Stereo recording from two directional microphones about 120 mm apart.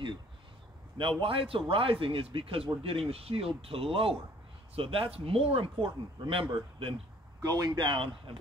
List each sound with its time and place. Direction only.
0.9 s speech: 45° right (ahead or behind)
7.4 s speech: 30° right (ahead or behind)
7.8 s speech: 45° right (ahead or behind)